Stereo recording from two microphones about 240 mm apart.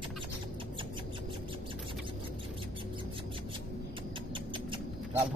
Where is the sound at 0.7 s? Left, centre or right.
Right.